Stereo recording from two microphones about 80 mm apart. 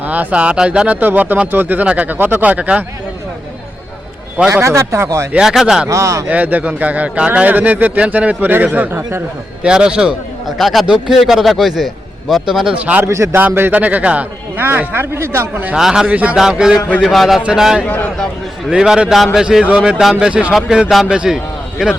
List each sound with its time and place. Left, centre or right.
0.0 s a man's voice: right
4.4 s a man's voice: right
5.4 s speech: centre
5.9 s a man's voice: right
6.2 s a man's voice: centre
9.6 s speech: centre
12.8 s speech: centre
13.1 s a man's voice: right
13.3 s a man's voice: right
15.7 s speech: centre